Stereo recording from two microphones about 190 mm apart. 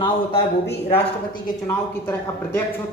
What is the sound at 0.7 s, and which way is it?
Speech, 60° left (ahead or behind).